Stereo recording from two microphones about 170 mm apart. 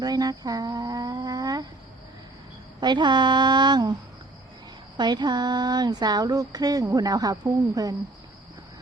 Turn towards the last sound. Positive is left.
turn(degrees=-20)  # may be behind; listen again after turning